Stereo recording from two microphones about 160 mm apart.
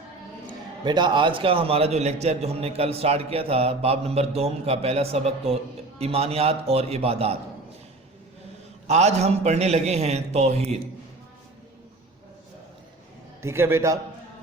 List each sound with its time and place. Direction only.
0.9 s a man's voice: 30° right (ahead or behind)
8.9 s a man's voice: 45° right (ahead or behind)
13.4 s a man's voice: 15° right (ahead or behind)